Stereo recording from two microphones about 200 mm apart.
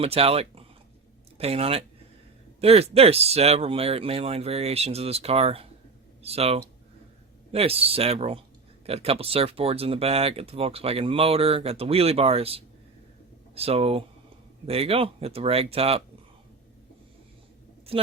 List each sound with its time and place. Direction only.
0.0 s speech: 30° right (ahead or behind)
17.9 s speech: 30° right (ahead or behind)